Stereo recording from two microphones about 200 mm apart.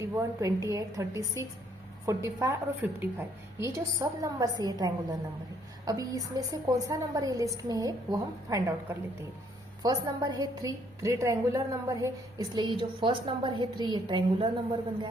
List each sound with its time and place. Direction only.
0.0 s a woman's voice: 15° right (ahead or behind)